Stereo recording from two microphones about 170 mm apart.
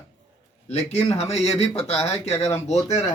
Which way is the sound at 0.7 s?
40° left (ahead or behind).